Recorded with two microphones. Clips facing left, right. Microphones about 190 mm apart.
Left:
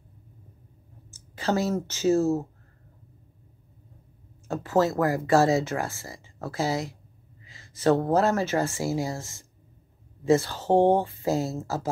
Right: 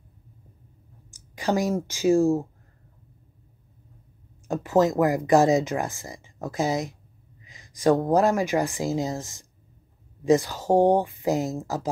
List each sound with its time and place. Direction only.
1.1 s speech: 15° right (ahead or behind)
4.5 s speech: 15° right (ahead or behind)